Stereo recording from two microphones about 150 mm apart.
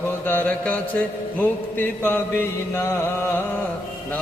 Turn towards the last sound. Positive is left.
turn(degrees=15)  # may be behind; listen again after turning